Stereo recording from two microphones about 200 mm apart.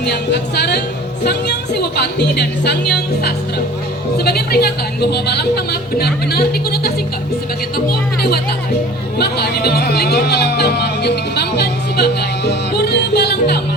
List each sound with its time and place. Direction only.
0.0 s speech: 55° left (ahead or behind)